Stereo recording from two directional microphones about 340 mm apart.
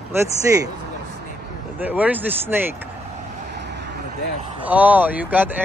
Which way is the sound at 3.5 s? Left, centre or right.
Right.